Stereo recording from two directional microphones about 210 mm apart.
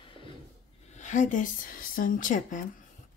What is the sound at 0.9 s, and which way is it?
Speech, 35° left (ahead or behind).